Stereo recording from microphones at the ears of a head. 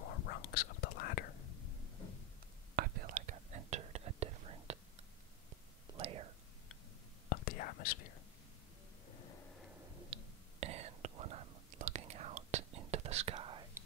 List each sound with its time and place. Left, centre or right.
0.0 s whispering: left
2.7 s whispering: right
7.2 s whispering: left
10.0 s whispering: right